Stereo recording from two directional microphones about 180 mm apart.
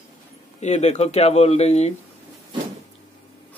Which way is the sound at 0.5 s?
40° left (ahead or behind).